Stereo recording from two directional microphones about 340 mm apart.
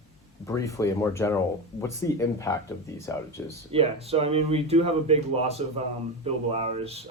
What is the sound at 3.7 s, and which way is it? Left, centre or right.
Speech, centre.